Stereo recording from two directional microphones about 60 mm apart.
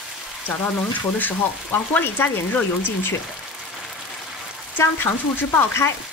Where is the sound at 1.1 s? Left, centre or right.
Left.